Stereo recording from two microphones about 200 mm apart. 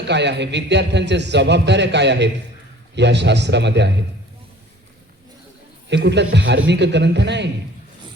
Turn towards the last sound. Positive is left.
turn(degrees=-60)  # may be behind; listen again after turning